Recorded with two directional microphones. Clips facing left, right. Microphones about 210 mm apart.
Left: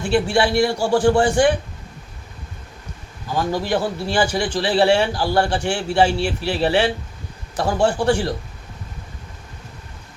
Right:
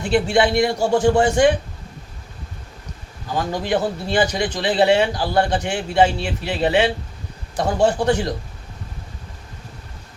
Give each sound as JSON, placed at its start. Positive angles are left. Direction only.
{"t": 0.0, "sound": "speech", "side_deg": -20}
{"t": 3.6, "sound": "speech", "side_deg": -20}